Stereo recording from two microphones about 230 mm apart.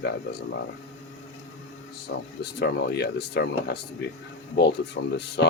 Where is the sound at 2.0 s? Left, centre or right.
Left.